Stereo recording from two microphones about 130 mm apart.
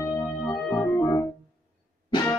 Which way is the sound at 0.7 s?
25° left (ahead or behind).